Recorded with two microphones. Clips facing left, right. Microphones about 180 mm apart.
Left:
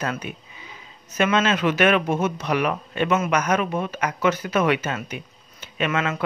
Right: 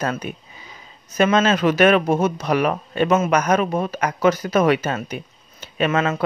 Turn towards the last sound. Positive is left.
turn(degrees=-30)  # may be behind; listen again after turning